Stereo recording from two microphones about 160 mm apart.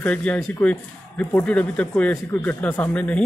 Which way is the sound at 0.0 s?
10° left (ahead or behind).